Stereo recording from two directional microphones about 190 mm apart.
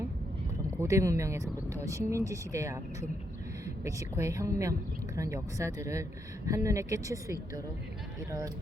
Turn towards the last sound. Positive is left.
turn(degrees=-15)  # may be behind; listen again after turning